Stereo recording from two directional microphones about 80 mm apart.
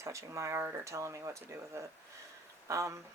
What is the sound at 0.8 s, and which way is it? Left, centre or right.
Speech, right.